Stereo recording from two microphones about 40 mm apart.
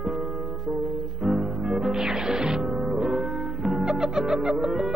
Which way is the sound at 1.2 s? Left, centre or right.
Centre.